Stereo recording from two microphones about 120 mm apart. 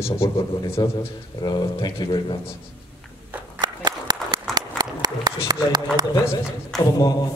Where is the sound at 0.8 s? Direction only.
35° left (ahead or behind).